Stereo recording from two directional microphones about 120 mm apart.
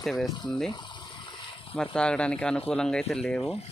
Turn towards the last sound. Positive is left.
turn(degrees=5)  # may be behind; listen again after turning